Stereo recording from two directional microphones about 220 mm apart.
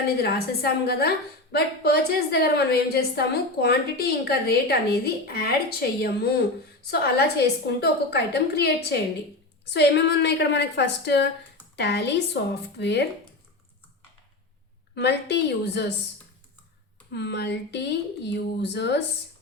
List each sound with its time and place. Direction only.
0.2 s a woman's voice: 45° left (ahead or behind)
14.9 s a woman's voice: 50° left (ahead or behind)
17.1 s a woman's voice: 50° left (ahead or behind)